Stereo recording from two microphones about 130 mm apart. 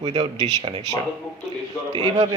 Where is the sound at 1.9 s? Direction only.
30° right (ahead or behind).